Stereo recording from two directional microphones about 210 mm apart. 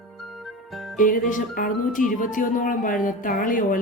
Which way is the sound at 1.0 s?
40° left (ahead or behind).